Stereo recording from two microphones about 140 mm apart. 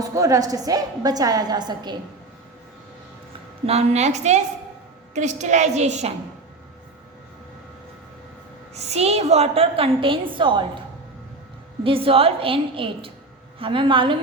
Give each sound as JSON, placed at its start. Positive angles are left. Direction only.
{"t": 0.0, "sound": "a woman's voice", "side_deg": -25}
{"t": 3.7, "sound": "a woman's voice", "side_deg": -50}
{"t": 8.7, "sound": "a woman's voice", "side_deg": -50}
{"t": 11.8, "sound": "a woman's voice", "side_deg": -40}